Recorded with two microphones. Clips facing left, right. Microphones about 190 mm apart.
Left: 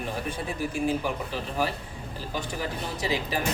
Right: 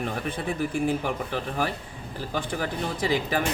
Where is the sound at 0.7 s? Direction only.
55° right (ahead or behind).